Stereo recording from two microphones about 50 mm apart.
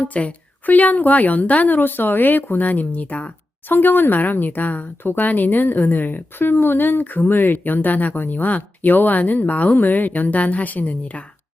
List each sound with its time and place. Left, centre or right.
0.1 s a woman's voice: left
3.7 s a woman's voice: left